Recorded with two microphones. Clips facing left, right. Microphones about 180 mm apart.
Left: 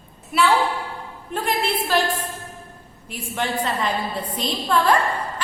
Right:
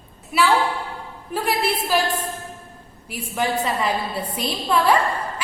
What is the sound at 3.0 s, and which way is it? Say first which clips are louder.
A woman's voice: right 2 dB; 5° right (ahead or behind).